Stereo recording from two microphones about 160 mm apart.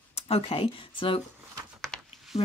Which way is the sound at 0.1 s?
35° left (ahead or behind).